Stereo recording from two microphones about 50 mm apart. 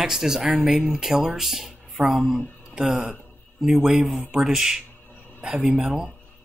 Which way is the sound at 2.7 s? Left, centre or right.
Right.